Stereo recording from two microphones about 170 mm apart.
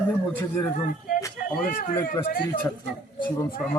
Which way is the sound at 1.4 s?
55° left (ahead or behind).